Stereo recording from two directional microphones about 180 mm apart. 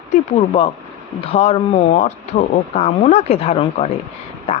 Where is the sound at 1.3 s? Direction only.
35° left (ahead or behind).